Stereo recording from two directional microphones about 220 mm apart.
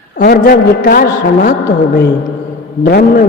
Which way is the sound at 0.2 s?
45° left (ahead or behind).